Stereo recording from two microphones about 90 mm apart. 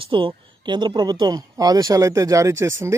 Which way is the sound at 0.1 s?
70° right (ahead or behind).